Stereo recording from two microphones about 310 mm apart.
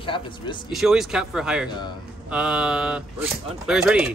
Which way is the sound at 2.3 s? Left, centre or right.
Centre.